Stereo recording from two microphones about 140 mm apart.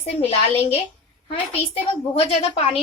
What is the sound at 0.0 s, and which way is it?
A woman's voice, 50° left (ahead or behind).